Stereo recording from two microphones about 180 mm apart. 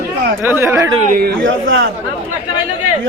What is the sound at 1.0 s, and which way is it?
Speech, 50° right (ahead or behind).